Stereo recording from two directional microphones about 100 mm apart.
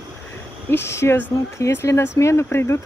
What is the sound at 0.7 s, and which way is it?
Speech, 25° left (ahead or behind).